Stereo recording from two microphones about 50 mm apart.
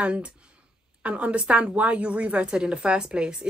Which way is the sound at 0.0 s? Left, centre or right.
Right.